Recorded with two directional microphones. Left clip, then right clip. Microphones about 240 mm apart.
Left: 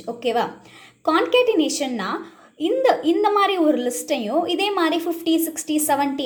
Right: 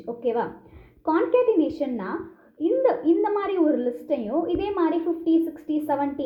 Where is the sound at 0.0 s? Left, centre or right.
Centre.